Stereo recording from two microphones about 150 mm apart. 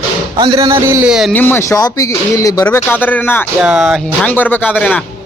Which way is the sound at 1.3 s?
15° left (ahead or behind).